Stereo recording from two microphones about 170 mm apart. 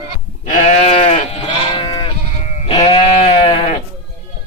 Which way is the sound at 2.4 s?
40° left (ahead or behind).